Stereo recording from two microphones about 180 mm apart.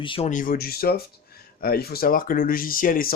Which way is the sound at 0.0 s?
30° left (ahead or behind).